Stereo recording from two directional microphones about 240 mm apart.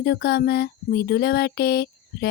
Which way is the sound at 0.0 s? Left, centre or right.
Left.